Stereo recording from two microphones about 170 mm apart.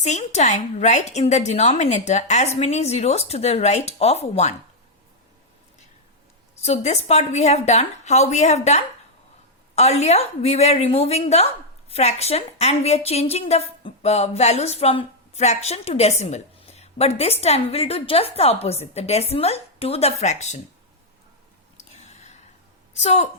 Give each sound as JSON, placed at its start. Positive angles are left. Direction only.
{"t": 0.0, "sound": "a woman's voice", "side_deg": 40}
{"t": 6.6, "sound": "a woman's voice", "side_deg": 40}
{"t": 21.9, "sound": "a sound", "side_deg": 40}
{"t": 23.0, "sound": "a woman's voice", "side_deg": 40}